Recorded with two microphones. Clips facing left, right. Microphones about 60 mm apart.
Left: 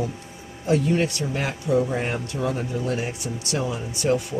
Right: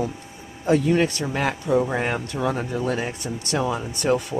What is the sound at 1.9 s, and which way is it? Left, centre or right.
Speech, right.